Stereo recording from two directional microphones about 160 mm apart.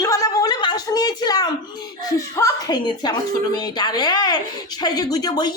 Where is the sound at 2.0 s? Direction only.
20° left (ahead or behind).